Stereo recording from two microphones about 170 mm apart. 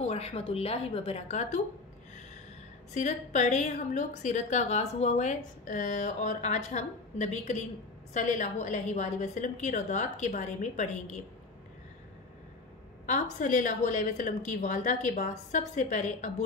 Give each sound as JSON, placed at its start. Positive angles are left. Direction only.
{"t": 0.0, "sound": "a woman's voice", "side_deg": 35}
{"t": 2.9, "sound": "a woman's voice", "side_deg": 45}
{"t": 13.0, "sound": "a woman's voice", "side_deg": 45}